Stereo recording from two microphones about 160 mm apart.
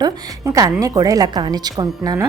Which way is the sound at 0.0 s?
20° right (ahead or behind).